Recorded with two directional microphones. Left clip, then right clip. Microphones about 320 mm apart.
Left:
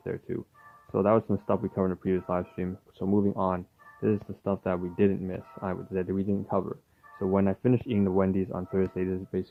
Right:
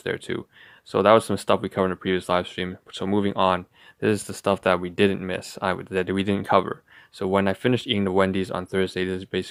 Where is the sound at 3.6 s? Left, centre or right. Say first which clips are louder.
Right 5 dB; centre.